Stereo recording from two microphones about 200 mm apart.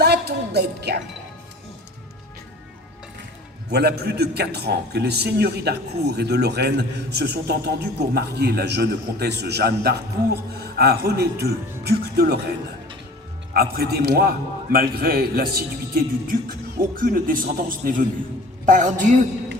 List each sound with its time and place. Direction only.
0.0 s music: 55° right (ahead or behind)
3.7 s a man's voice: 55° right (ahead or behind)
13.5 s a man's voice: 50° right (ahead or behind)